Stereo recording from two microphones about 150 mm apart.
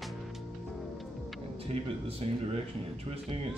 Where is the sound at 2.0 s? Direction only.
40° right (ahead or behind).